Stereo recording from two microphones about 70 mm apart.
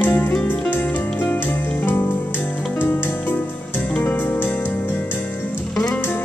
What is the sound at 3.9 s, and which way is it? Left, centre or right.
Music, left.